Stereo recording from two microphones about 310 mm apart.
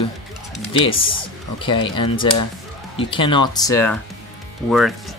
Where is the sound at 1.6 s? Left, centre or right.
Centre.